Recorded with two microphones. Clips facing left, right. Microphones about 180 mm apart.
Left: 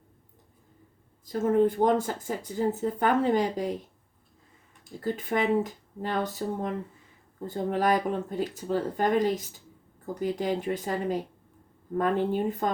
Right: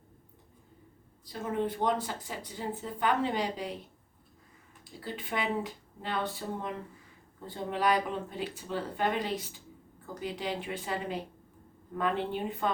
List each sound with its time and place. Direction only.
1.2 s speech: 45° left (ahead or behind)
4.9 s a woman's voice: 45° left (ahead or behind)